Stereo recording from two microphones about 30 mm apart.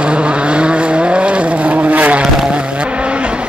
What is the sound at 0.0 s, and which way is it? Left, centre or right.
Vehicle, right.